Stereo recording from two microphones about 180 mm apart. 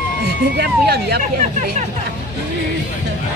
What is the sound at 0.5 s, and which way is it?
Speech, 65° right (ahead or behind).